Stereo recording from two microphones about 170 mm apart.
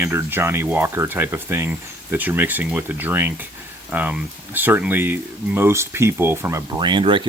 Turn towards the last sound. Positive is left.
turn(degrees=-30)  # may be behind; listen again after turning